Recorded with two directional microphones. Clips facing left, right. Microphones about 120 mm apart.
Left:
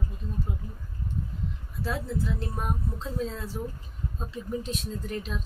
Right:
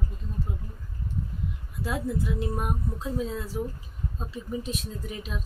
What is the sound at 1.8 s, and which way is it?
Speech, 15° right (ahead or behind).